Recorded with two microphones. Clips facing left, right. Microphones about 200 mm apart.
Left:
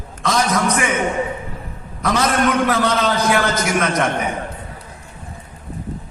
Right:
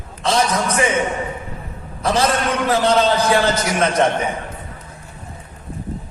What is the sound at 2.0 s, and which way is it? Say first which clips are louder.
Speech: right 1 dB; 30° right (ahead or behind).